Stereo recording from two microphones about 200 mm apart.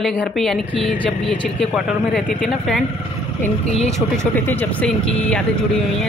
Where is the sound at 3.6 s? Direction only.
35° left (ahead or behind).